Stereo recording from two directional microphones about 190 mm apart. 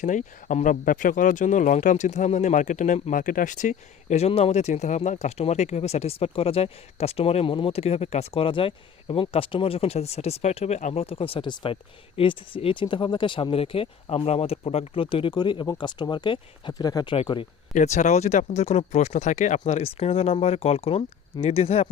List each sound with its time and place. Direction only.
0.0 s speech: 40° left (ahead or behind); by 17.4 s 25° left (ahead or behind)
17.7 s speech: 40° left (ahead or behind)